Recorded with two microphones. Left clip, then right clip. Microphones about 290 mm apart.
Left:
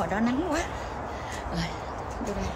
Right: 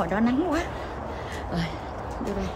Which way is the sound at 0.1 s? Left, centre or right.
Centre.